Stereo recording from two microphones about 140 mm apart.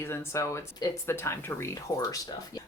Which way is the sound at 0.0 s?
20° left (ahead or behind).